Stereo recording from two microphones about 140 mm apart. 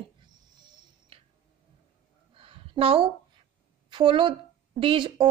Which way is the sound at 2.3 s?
40° right (ahead or behind).